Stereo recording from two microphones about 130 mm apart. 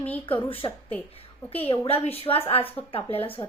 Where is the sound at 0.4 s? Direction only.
45° left (ahead or behind).